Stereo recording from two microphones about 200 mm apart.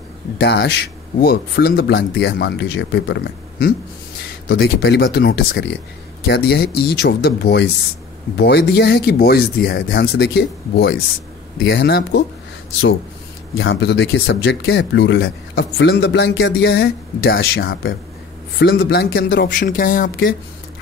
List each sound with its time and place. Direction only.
0.4 s speech: 60° left (ahead or behind)
13.6 s speech: 65° left (ahead or behind); by 20.3 s 45° left (ahead or behind)